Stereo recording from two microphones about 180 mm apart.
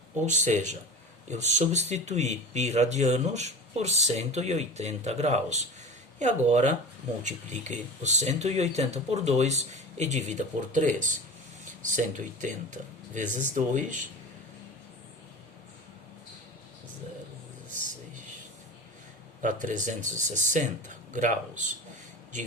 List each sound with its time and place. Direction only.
0.3 s speech: 40° right (ahead or behind)
19.4 s speech: 45° right (ahead or behind)